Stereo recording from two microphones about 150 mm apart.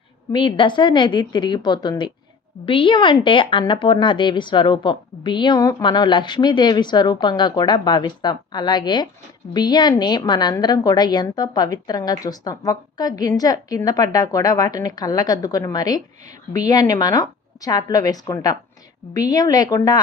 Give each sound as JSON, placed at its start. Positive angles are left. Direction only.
{"t": 0.3, "sound": "a woman's voice", "side_deg": 30}